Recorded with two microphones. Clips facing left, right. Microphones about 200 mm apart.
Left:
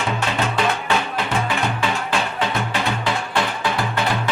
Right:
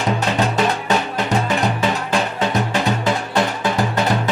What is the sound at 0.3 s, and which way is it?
Music, 40° right (ahead or behind).